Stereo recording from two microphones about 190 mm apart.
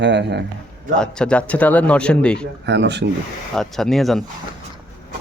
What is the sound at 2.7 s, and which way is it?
Speech, 65° right (ahead or behind).